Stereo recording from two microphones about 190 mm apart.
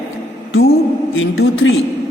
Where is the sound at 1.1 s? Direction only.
90° left.